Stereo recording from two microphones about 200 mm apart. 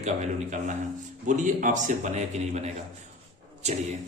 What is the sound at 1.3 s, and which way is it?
A man's voice, 40° right (ahead or behind).